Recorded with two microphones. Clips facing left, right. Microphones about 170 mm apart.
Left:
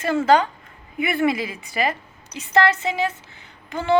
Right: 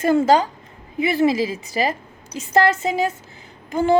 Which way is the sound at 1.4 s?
40° right (ahead or behind).